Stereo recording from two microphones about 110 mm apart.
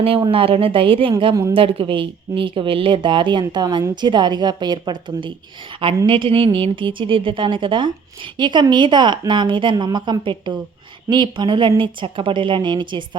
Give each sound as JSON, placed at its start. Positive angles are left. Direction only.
{"t": 0.3, "sound": "a woman's voice", "side_deg": -55}